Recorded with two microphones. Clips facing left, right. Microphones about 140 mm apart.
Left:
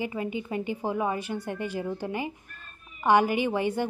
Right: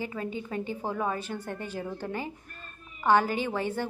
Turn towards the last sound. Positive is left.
turn(degrees=15)  # may be behind; listen again after turning